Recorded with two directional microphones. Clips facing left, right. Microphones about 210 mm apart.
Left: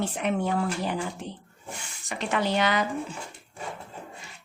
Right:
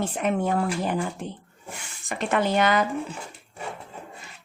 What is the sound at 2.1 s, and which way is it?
Speech, 50° right (ahead or behind).